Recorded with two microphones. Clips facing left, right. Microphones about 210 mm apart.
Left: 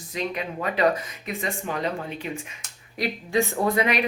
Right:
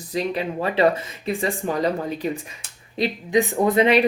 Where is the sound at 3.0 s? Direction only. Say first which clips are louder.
Right 4 dB; 15° right (ahead or behind).